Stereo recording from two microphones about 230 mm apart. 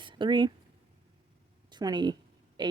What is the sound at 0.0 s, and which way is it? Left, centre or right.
Speech, right.